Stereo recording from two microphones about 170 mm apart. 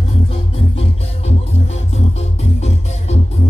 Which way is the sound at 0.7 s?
35° left (ahead or behind).